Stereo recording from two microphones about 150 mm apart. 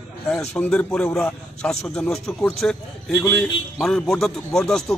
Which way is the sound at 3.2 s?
15° left (ahead or behind).